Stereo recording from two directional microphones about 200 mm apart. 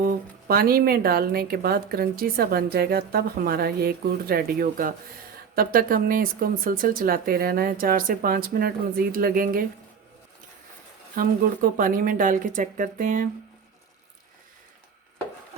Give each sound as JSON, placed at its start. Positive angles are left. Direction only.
{"t": 0.0, "sound": "speech", "side_deg": -45}
{"t": 11.1, "sound": "speech", "side_deg": -45}